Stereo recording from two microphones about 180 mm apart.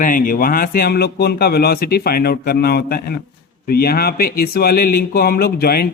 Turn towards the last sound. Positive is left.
turn(degrees=60)  # may be behind; listen again after turning